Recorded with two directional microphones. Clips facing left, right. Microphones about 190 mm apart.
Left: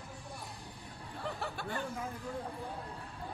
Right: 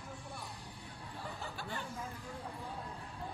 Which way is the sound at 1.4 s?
60° left (ahead or behind).